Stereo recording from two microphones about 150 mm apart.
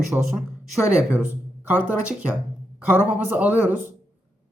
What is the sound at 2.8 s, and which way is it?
A woman's voice, 10° right (ahead or behind).